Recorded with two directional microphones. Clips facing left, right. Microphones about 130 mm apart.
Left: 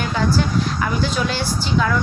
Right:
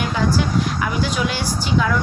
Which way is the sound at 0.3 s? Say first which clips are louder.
Even; 10° right (ahead or behind).